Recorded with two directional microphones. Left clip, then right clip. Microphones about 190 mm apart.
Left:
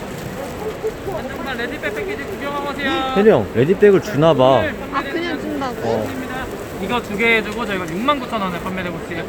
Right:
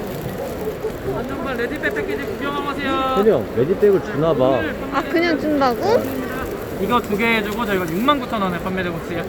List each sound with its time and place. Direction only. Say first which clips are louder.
2.8 s speech: even; 20° left (ahead or behind)
3.2 s speech: left 5 dB; 60° left (ahead or behind)
4.9 s speech: right 5 dB; 20° right (ahead or behind)
6.9 s speech: left 2 dB; centre (ahead or behind)